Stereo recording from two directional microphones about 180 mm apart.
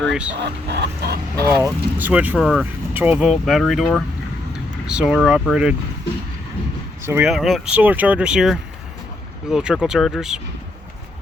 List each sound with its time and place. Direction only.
0.1 s speech: 5° right (ahead or behind)
0.3 s speech: 65° right (ahead or behind)
1.5 s speech: 15° right (ahead or behind)
7.0 s speech: 15° right (ahead or behind)
7.3 s speech: centre (ahead or behind)